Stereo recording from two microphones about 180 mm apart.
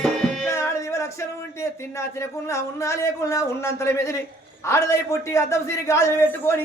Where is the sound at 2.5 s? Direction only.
15° left (ahead or behind).